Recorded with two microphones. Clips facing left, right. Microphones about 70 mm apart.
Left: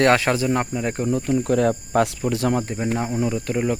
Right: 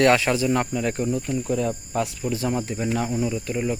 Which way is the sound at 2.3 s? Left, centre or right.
Left.